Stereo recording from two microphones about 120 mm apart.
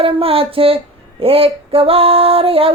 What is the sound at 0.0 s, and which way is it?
Music, 50° right (ahead or behind).